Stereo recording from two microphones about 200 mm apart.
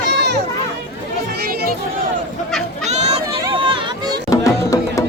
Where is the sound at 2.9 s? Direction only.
35° right (ahead or behind).